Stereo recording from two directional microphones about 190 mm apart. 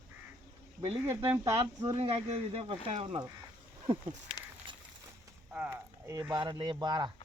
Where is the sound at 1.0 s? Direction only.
10° right (ahead or behind).